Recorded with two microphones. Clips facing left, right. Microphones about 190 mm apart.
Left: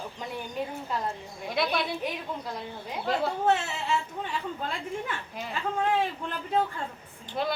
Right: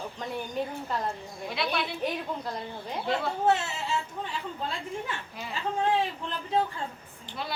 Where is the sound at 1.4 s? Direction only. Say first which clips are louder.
Left 3 dB; 50° left (ahead or behind).